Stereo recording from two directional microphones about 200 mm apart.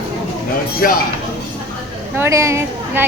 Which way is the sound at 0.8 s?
45° left (ahead or behind).